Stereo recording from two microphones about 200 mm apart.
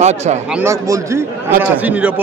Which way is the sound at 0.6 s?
15° right (ahead or behind).